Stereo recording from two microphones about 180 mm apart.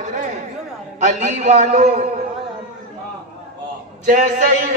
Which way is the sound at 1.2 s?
40° right (ahead or behind).